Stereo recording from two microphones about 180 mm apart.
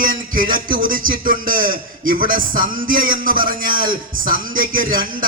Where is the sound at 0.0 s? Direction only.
50° right (ahead or behind).